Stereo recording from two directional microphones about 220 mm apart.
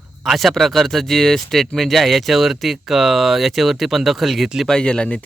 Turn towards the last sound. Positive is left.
turn(degrees=5)  # may be behind; listen again after turning